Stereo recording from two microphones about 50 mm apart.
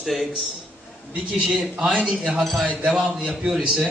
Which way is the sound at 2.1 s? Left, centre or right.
Centre.